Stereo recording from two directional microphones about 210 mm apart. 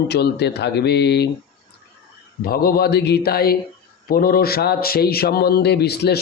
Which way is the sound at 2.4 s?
45° left (ahead or behind).